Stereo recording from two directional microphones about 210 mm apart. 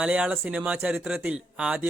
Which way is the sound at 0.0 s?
5° right (ahead or behind).